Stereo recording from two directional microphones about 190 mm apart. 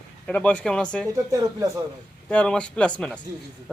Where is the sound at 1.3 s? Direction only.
20° right (ahead or behind).